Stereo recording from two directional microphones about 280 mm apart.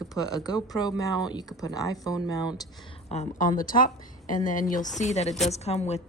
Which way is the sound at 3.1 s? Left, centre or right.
Left.